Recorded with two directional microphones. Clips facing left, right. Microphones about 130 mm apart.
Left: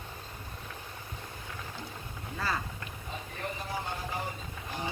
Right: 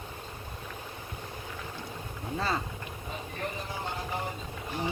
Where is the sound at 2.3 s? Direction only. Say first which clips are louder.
Right 3 dB; 25° right (ahead or behind).